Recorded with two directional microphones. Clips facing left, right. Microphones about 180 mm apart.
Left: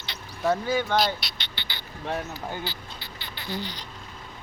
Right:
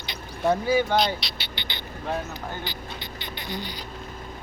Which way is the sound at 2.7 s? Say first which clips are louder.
Right 3 dB; 15° right (ahead or behind).